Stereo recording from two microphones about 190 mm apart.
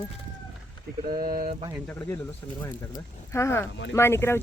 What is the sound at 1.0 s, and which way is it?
Speech, 50° right (ahead or behind).